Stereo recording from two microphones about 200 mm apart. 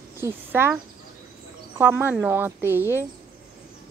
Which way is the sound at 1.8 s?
10° right (ahead or behind).